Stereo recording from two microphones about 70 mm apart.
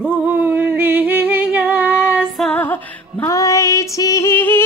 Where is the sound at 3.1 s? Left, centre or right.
Left.